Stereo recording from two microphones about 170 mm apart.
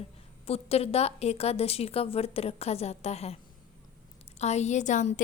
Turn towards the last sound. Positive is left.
turn(degrees=45)  # may be behind; listen again after turning